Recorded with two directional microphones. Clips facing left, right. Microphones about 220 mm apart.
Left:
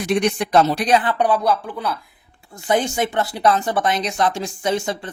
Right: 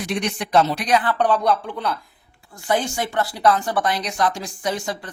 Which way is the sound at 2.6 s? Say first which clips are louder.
Left 3 dB; 20° left (ahead or behind).